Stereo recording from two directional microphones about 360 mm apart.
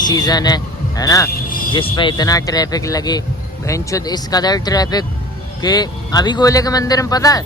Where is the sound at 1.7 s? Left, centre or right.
Centre.